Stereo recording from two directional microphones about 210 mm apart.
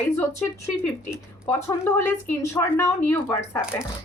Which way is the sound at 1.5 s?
10° left (ahead or behind).